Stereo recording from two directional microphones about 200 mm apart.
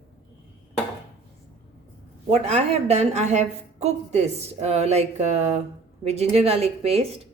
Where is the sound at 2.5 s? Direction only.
35° right (ahead or behind).